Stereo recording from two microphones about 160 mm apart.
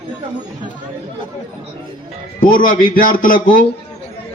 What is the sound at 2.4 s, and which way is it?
A man's voice, 60° left (ahead or behind).